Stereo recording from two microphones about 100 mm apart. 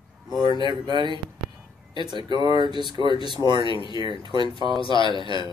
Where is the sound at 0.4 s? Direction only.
45° right (ahead or behind).